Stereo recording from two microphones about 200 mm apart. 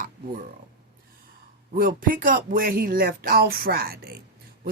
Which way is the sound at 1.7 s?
45° right (ahead or behind).